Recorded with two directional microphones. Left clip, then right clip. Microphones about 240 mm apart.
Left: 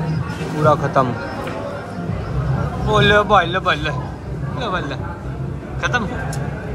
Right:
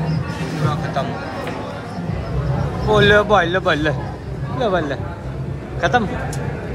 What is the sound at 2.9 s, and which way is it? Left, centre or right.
Speech, centre.